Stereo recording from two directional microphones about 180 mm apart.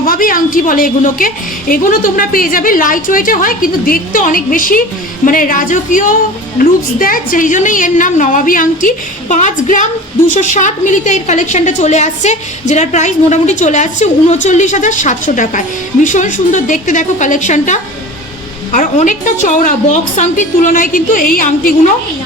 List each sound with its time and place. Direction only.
0.0 s a woman's voice: 50° left (ahead or behind)